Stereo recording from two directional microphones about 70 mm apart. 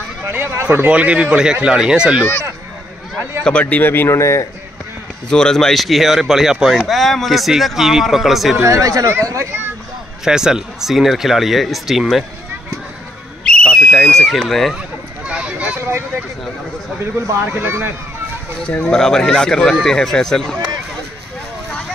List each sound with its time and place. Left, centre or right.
0.2 s speech: right
0.8 s speech: centre
3.4 s speech: centre; by 4.5 s left
5.3 s speech: centre
8.6 s speech: right
10.2 s speech: centre
13.5 s a sound: centre
14.3 s speech: centre
15.2 s a sound: centre
17.0 s speech: right
18.8 s speech: centre